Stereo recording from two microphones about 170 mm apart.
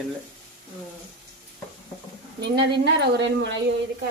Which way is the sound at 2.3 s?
80° right.